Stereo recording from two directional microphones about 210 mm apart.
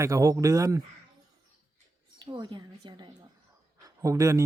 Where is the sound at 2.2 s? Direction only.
20° right (ahead or behind).